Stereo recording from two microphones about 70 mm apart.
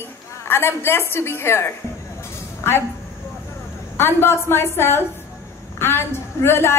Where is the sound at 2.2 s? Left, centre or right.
Left.